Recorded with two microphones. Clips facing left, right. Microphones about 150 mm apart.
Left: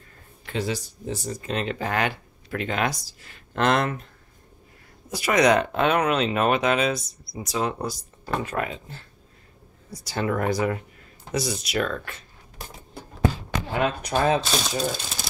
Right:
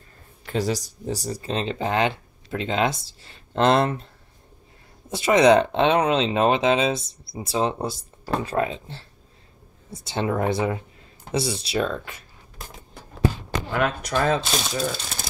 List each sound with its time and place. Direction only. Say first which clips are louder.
0.5 s speech: right 3 dB; 40° right (ahead or behind)
5.1 s speech: right 4 dB; 25° right (ahead or behind)
13.7 s speech: right 1 dB; 75° right (ahead or behind)
14.2 s speech: left 1 dB; centre (ahead or behind)